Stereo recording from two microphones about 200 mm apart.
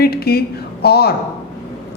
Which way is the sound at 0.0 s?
50° left (ahead or behind).